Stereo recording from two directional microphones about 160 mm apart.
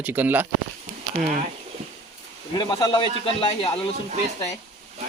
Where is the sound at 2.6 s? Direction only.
30° left (ahead or behind).